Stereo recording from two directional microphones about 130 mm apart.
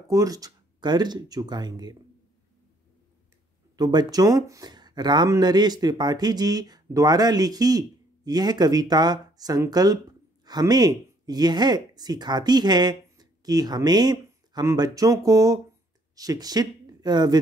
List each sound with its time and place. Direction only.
0.1 s speech: 25° right (ahead or behind)
3.7 s speech: 30° right (ahead or behind)